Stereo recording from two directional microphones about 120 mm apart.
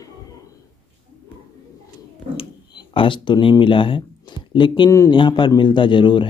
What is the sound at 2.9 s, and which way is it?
Speech, 45° left (ahead or behind).